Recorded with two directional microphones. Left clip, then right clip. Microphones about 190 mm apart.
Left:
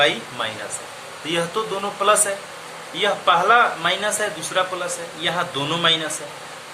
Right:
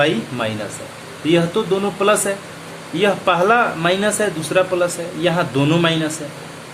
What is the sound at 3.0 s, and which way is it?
Speech, 15° right (ahead or behind).